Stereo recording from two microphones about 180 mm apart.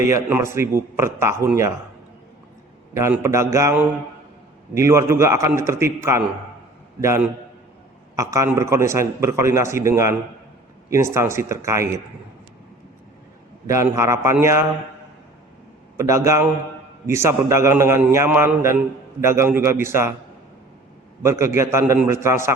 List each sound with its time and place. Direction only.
0.0 s a man's voice: 15° right (ahead or behind)
2.9 s a man's voice: 15° right (ahead or behind)
13.7 s a man's voice: 15° right (ahead or behind)
16.0 s a man's voice: 15° right (ahead or behind)
21.2 s a man's voice: 15° right (ahead or behind)